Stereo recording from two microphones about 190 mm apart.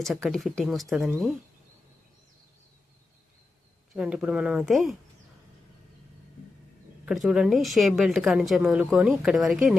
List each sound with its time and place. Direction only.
0.0 s speech: centre (ahead or behind)
3.9 s speech: 5° right (ahead or behind)
7.0 s speech: 5° right (ahead or behind)